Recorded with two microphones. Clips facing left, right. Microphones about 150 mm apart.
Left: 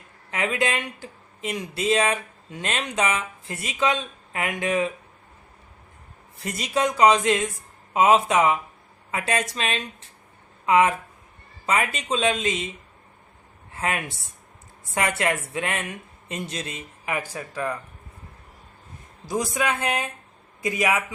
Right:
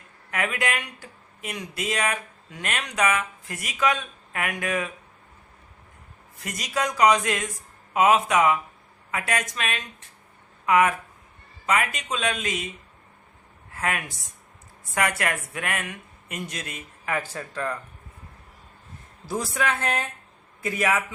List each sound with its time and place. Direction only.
0.3 s speech: 25° left (ahead or behind)
6.4 s speech: 30° left (ahead or behind)
13.7 s speech: 25° left (ahead or behind)
19.2 s a man's voice: 15° left (ahead or behind)